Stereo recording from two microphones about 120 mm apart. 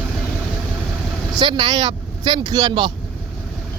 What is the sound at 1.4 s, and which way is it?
Speech, 45° right (ahead or behind).